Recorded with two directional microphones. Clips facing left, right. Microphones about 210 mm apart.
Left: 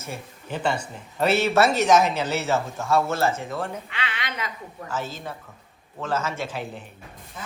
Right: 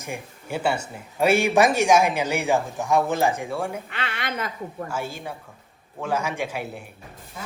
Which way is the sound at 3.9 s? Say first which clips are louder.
Right 3 dB; 50° right (ahead or behind).